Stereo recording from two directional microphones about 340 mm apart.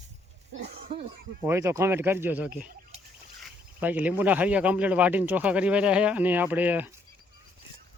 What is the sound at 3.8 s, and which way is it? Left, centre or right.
Speech, centre.